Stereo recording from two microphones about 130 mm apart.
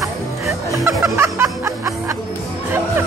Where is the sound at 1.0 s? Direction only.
20° right (ahead or behind).